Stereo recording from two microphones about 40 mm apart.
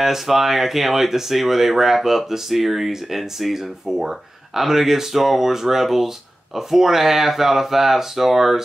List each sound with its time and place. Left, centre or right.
0.0 s speech: centre